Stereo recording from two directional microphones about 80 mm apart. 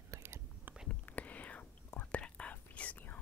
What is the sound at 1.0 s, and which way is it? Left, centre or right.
Whispering, centre.